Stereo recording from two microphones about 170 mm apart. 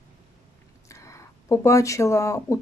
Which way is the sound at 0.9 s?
20° left (ahead or behind).